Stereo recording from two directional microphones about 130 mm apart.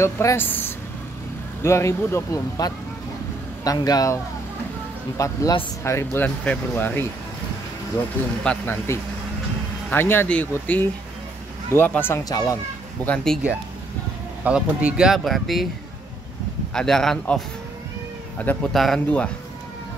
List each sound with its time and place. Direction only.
0.0 s speech: 20° left (ahead or behind)
8.5 s speech: 20° left (ahead or behind)
12.3 s speech: 25° left (ahead or behind)
13.0 s speech: 5° left (ahead or behind)
14.4 s speech: 10° right (ahead or behind)
16.7 s speech: 5° left (ahead or behind)
18.4 s speech: 10° left (ahead or behind)
18.7 s speech: centre (ahead or behind)